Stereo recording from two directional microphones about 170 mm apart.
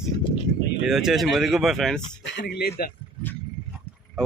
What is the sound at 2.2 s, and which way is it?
Speech, 85° left.